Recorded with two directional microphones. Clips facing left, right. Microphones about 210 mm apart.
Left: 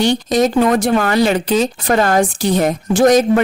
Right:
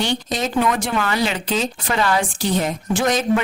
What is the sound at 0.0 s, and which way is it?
Speech, 40° left (ahead or behind).